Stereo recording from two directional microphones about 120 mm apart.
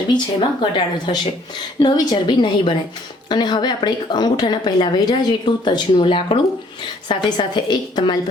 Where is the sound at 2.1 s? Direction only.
40° left (ahead or behind).